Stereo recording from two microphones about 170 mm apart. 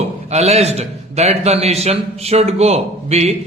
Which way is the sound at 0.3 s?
40° right (ahead or behind).